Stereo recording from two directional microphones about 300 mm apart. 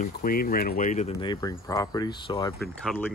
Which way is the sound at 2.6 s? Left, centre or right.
Centre.